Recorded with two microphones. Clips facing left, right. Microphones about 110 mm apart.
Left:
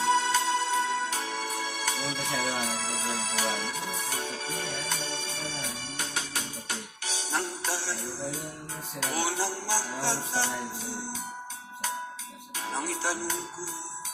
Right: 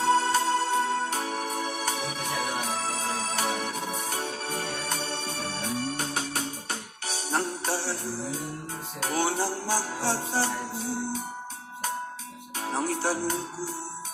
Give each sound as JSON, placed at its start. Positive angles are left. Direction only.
{"t": 0.0, "sound": "music", "side_deg": -40}
{"t": 9.0, "sound": "music", "side_deg": -40}
{"t": 12.5, "sound": "music", "side_deg": -35}